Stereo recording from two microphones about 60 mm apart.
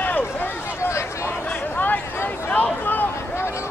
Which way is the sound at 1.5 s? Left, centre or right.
Left.